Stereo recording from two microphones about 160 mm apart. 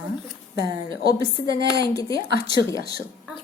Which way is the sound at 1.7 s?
20° left (ahead or behind).